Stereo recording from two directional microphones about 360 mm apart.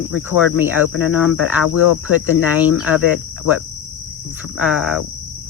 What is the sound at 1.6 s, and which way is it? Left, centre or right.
Cricket, left.